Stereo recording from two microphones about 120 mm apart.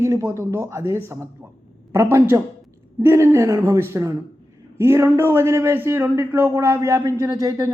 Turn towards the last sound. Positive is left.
turn(degrees=-30)  # may be behind; listen again after turning